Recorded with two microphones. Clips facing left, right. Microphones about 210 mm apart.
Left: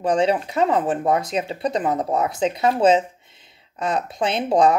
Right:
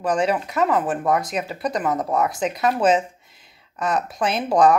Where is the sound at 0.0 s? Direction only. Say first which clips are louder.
Left 2 dB; 25° left (ahead or behind).